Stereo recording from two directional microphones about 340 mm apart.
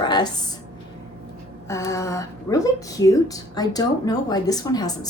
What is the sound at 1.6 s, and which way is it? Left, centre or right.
A woman's voice, centre.